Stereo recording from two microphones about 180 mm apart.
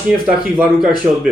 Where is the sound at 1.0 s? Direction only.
10° right (ahead or behind).